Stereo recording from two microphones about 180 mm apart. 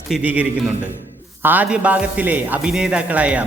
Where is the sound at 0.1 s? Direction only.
10° right (ahead or behind).